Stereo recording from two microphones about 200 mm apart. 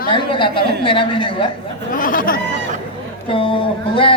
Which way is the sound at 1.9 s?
45° left (ahead or behind).